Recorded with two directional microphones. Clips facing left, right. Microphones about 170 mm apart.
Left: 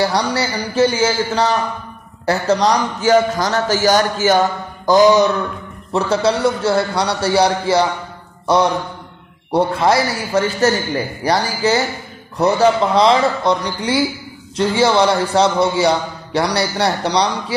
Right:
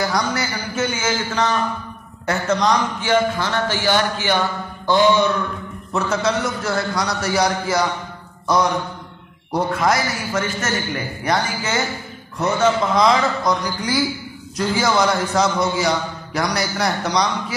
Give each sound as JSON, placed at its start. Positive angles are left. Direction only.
{"t": 0.0, "sound": "a man's voice", "side_deg": 35}
{"t": 9.5, "sound": "a man's voice", "side_deg": 30}